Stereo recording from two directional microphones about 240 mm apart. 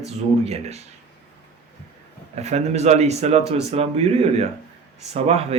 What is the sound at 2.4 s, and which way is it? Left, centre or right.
Speech, right.